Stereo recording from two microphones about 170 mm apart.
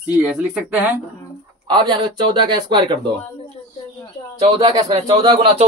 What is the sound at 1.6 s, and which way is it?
Speech, 25° right (ahead or behind).